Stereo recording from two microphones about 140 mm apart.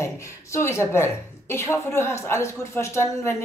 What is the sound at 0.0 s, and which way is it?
A woman's voice, 20° left (ahead or behind).